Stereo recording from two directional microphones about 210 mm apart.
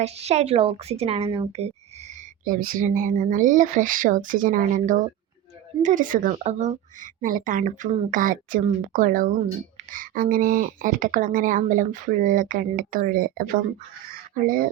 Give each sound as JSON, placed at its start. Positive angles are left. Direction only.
{"t": 0.0, "sound": "a woman's voice", "side_deg": -30}
{"t": 2.4, "sound": "speech", "side_deg": -40}
{"t": 14.1, "sound": "fowl", "side_deg": -40}